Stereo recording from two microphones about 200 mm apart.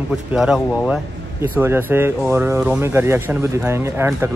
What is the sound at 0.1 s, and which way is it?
Speech, 5° right (ahead or behind).